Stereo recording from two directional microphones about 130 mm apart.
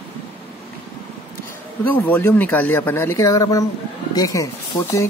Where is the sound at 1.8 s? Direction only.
15° left (ahead or behind).